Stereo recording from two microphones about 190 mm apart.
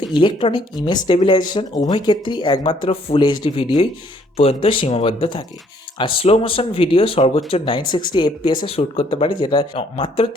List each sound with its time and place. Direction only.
0.1 s speech: 25° left (ahead or behind)